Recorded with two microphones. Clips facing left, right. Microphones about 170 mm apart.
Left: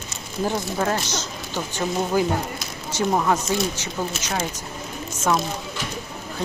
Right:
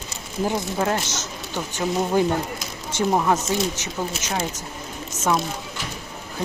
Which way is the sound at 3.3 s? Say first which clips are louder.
Even; 20° right (ahead or behind).